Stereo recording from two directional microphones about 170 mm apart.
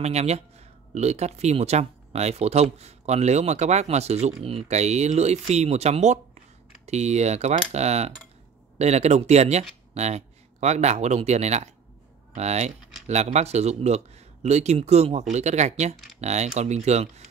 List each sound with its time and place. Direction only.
0.0 s speech: 40° right (ahead or behind)